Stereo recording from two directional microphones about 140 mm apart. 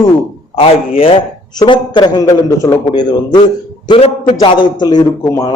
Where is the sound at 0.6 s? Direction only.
40° left (ahead or behind).